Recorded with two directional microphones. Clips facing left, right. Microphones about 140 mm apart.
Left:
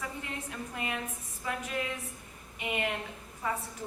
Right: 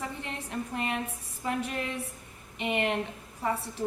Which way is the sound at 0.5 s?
30° right (ahead or behind).